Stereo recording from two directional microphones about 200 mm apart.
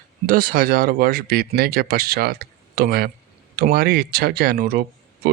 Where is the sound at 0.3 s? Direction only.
45° right (ahead or behind).